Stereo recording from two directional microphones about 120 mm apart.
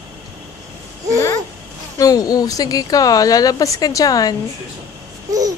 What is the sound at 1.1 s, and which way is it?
Babbling, 25° left (ahead or behind).